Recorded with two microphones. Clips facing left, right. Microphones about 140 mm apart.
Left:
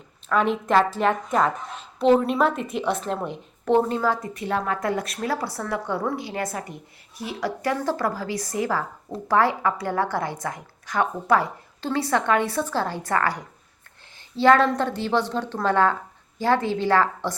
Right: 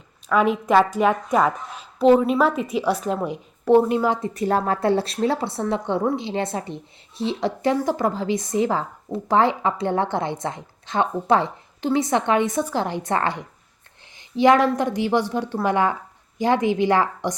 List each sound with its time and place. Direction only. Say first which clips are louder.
0.3 s a woman's voice: right 3 dB; 5° right (ahead or behind)
4.4 s a woman's voice: right 5 dB; 40° right (ahead or behind); by 17.3 s 15° right (ahead or behind)